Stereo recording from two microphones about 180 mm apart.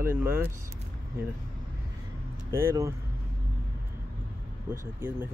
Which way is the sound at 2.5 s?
15° right (ahead or behind).